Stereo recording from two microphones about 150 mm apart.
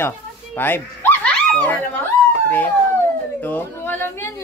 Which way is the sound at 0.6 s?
15° left (ahead or behind).